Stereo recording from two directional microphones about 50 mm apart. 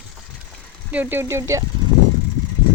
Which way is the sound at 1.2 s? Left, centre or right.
Right.